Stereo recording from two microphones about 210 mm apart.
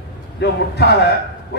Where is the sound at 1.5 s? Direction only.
55° left (ahead or behind).